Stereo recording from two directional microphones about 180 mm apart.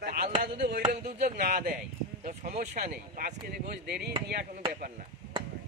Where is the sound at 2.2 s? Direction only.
50° right (ahead or behind); by 4.1 s 65° right (ahead or behind).